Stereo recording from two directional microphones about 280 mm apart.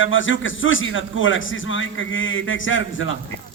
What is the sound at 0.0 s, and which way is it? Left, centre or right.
A man's voice, left.